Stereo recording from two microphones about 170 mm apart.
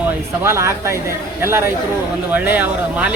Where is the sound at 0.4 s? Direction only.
15° right (ahead or behind).